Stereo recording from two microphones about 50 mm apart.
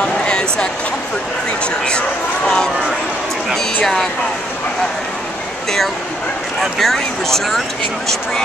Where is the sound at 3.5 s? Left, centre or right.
Centre.